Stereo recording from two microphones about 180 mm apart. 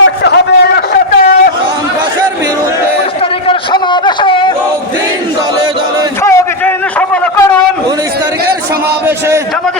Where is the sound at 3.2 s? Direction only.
30° left (ahead or behind).